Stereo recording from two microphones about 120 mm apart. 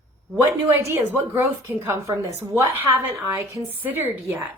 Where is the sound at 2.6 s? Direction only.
20° right (ahead or behind).